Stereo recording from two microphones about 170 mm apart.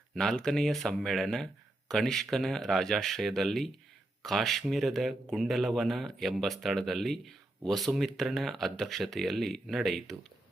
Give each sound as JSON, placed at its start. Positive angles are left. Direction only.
{"t": 0.1, "sound": "speech", "side_deg": 5}